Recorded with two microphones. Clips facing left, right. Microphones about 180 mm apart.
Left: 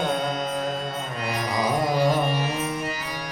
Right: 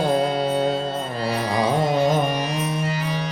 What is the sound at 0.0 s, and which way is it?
Music, 30° right (ahead or behind).